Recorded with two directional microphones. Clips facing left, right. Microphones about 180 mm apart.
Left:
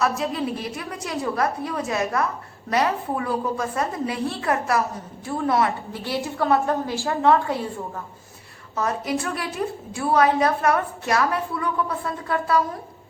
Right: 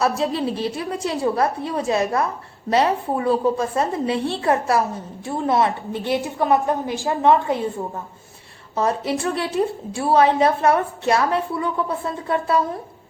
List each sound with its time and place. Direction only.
0.0 s a woman's voice: 30° right (ahead or behind)
8.7 s a woman's voice: 30° right (ahead or behind)